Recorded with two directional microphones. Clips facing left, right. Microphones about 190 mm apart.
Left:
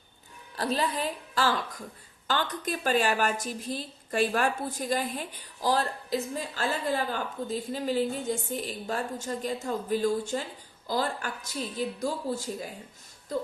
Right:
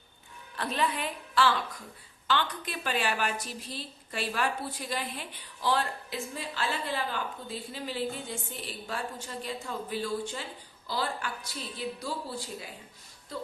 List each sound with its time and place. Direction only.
0.5 s a woman's voice: 35° left (ahead or behind)